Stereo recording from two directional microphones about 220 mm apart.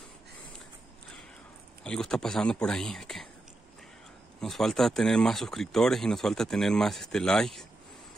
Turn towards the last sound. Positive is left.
turn(degrees=0)  # may be behind; listen again after turning